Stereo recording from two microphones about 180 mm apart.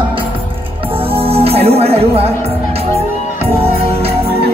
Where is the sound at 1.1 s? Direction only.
30° right (ahead or behind).